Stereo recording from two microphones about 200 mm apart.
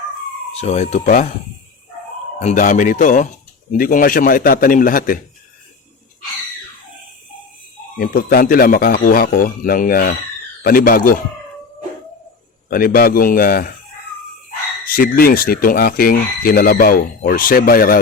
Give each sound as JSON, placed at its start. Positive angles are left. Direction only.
{"t": 0.6, "sound": "speech", "side_deg": 35}
{"t": 2.4, "sound": "speech", "side_deg": 35}
{"t": 7.9, "sound": "speech", "side_deg": 45}
{"t": 12.7, "sound": "speech", "side_deg": 50}
{"t": 14.8, "sound": "speech", "side_deg": 45}